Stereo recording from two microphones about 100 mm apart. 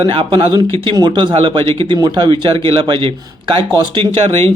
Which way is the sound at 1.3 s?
60° right (ahead or behind).